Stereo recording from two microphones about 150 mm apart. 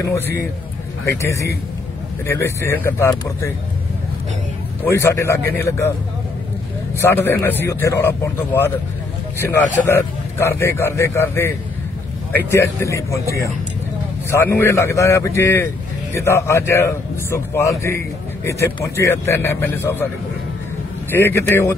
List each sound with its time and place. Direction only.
0.0 s a man's voice: 20° left (ahead or behind)
4.8 s a man's voice: 15° left (ahead or behind)
7.0 s a man's voice: 15° left (ahead or behind)
21.1 s a man's voice: 15° left (ahead or behind)